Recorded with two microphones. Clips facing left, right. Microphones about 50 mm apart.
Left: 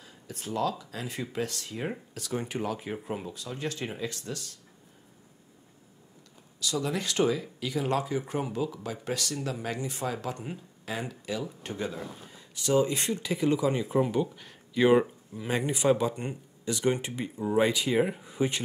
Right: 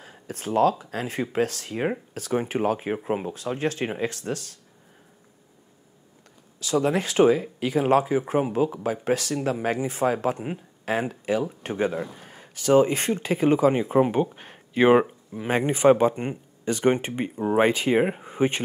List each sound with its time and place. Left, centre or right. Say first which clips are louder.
0.0 s speech: right 7 dB; right
6.6 s speech: right 8 dB; right